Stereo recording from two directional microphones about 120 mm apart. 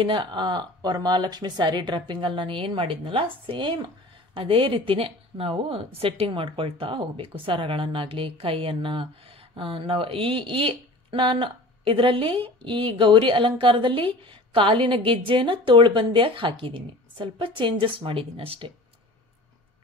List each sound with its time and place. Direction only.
0.0 s speech: 40° right (ahead or behind)